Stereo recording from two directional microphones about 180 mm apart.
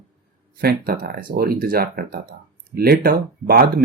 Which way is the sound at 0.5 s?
55° right (ahead or behind).